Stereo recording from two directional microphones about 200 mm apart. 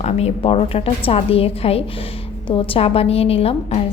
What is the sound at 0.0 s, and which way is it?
A woman's voice, 30° left (ahead or behind).